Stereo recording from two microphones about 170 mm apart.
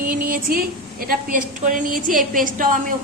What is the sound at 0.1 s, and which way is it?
A woman's voice, 55° right (ahead or behind).